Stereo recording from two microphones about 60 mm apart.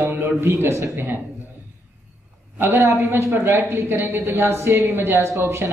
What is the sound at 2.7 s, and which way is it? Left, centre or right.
Speech, right.